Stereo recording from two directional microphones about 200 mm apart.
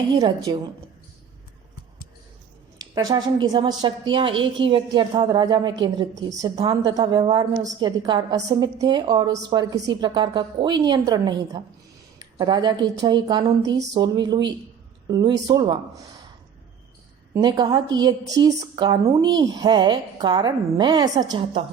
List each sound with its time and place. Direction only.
0.2 s a woman's voice: 20° right (ahead or behind)
2.9 s a woman's voice: 20° right (ahead or behind)
17.3 s a woman's voice: 20° right (ahead or behind)